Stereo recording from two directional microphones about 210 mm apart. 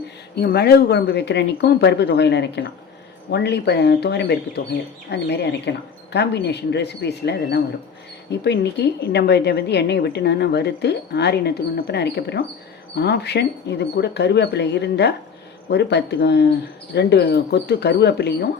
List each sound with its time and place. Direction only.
0.3 s a woman's voice: 50° left (ahead or behind)